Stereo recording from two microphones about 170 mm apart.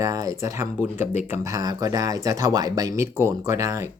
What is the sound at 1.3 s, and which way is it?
Speech, 20° right (ahead or behind).